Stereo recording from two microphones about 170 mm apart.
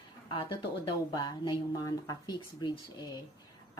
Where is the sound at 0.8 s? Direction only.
25° left (ahead or behind).